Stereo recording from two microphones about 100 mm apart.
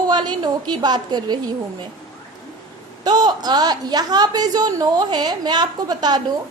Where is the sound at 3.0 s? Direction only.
45° right (ahead or behind).